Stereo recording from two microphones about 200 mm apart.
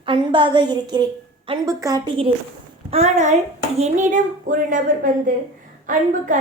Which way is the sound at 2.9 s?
30° right (ahead or behind).